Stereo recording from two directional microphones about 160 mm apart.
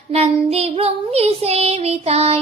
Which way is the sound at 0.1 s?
40° right (ahead or behind).